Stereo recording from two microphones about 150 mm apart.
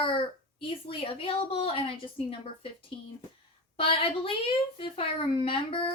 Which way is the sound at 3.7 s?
40° left (ahead or behind).